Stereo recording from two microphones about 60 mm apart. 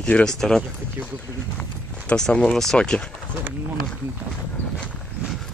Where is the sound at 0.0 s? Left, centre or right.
Centre.